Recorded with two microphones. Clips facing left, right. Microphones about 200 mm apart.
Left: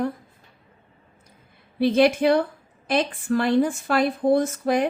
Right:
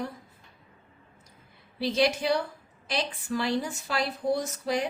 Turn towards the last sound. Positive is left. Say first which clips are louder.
# left 8 dB
turn(degrees=55)  # may be behind; listen again after turning